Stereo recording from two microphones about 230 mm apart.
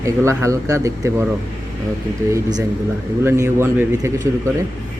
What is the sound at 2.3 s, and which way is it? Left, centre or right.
A man's voice, centre.